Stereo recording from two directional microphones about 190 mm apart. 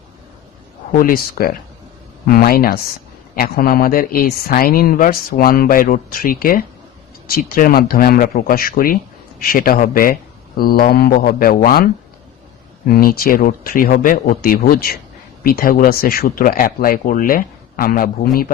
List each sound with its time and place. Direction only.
0.9 s speech: 50° left (ahead or behind)
12.9 s speech: 50° left (ahead or behind)